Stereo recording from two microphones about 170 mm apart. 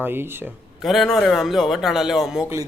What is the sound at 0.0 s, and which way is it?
Speech, 15° right (ahead or behind).